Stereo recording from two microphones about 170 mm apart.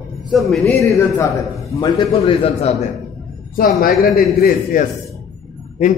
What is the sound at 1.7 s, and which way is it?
Speech, 20° left (ahead or behind).